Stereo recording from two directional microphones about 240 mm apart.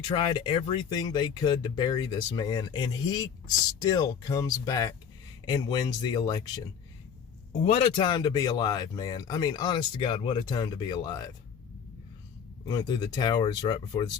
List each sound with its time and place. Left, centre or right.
0.1 s speech: centre
7.6 s speech: left
12.6 s speech: centre